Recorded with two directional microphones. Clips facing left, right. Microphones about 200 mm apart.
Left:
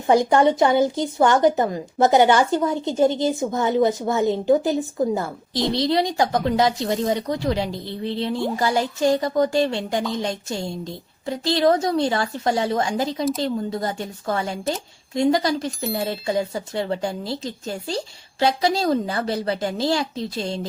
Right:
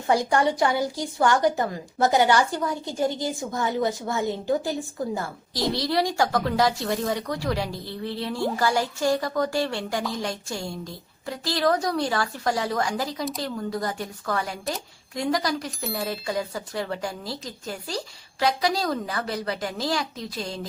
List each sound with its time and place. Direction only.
0.1 s a woman's voice: 20° left (ahead or behind)